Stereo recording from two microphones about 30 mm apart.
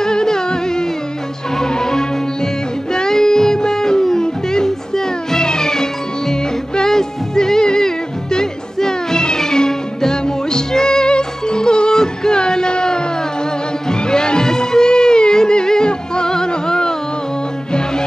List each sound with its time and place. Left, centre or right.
0.0 s music: left